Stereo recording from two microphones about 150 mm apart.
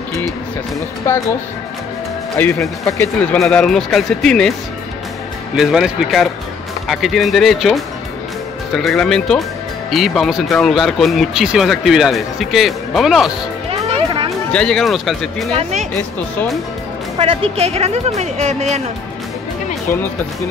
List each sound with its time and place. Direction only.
1.1 s speech: 15° left (ahead or behind)
2.4 s speech: 10° left (ahead or behind)
3.2 s speech: 5° left (ahead or behind)
5.6 s speech: 5° right (ahead or behind)
13.7 s music: 35° right (ahead or behind)
14.5 s speech: 5° left (ahead or behind)
15.5 s speech: 50° right (ahead or behind)
17.2 s speech: 40° right (ahead or behind)